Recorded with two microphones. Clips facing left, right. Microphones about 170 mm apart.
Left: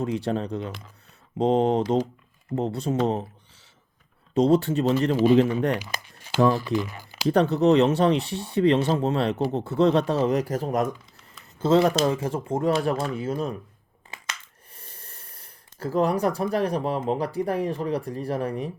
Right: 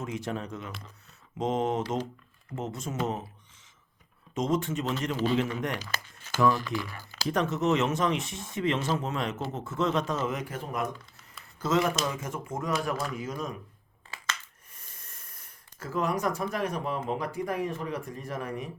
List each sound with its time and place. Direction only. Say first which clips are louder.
0.0 s speech: left 8 dB; 35° left (ahead or behind)
4.4 s speech: left 9 dB; 35° left (ahead or behind)
5.1 s a man's voice: left 9 dB; 15° left (ahead or behind)
5.4 s speech: left 9 dB; 35° left (ahead or behind)
5.8 s crumpling: left 2 dB; 15° left (ahead or behind)
6.7 s speech: left 7 dB; 20° left (ahead or behind)
7.3 s speech: left 8 dB; 35° left (ahead or behind)
14.7 s speech: left 7 dB; 30° left (ahead or behind)